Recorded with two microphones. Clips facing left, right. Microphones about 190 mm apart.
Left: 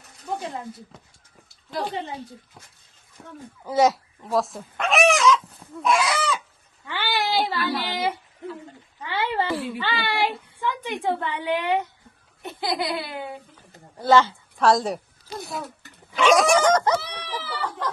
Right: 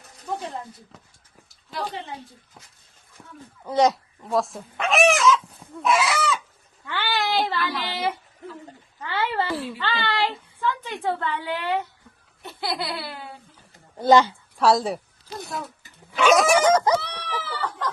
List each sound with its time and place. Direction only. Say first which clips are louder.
3.6 s speech: even; 5° left (ahead or behind)
6.8 s a sound: even; 15° left (ahead or behind)
9.0 s speech: even; 15° left (ahead or behind)
9.5 s a child's voice: left 1 dB; centre (ahead or behind)
9.7 s a woman's voice: even; 10° left (ahead or behind)
14.0 s a sound: right 2 dB; 15° right (ahead or behind)
14.6 s a woman's voice: even; 5° right (ahead or behind)
16.1 s a sound: even; 5° right (ahead or behind)
17.0 s a woman's voice: right 1 dB; 10° left (ahead or behind)